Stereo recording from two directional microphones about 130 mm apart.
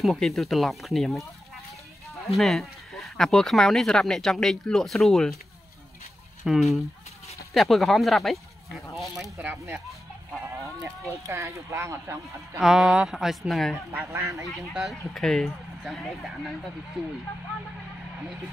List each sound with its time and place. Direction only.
0.0 s speech: centre (ahead or behind)
2.3 s speech: centre (ahead or behind)
6.4 s speech: centre (ahead or behind)
10.4 s sheep: 20° right (ahead or behind)
11.1 s speech: 25° right (ahead or behind)
12.5 s speech: centre (ahead or behind)
14.1 s speech: 25° right (ahead or behind)
14.7 s speech: centre (ahead or behind)